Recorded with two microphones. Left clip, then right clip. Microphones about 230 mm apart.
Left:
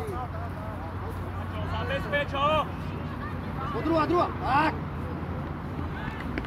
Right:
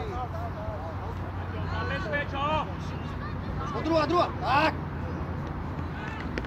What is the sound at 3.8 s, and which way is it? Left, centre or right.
Speech, right.